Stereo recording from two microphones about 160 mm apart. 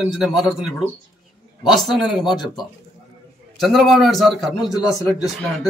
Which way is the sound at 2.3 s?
25° left (ahead or behind).